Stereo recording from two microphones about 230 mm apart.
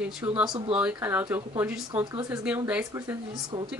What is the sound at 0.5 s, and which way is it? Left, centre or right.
Speech, centre.